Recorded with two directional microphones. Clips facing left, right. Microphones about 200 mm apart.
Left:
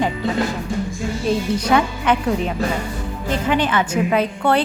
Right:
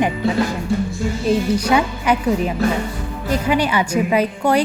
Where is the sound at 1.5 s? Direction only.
10° right (ahead or behind).